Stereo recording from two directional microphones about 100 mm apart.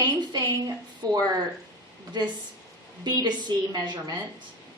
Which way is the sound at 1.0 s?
40° right (ahead or behind).